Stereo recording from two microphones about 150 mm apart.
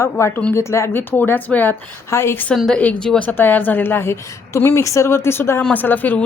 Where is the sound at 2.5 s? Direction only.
5° left (ahead or behind).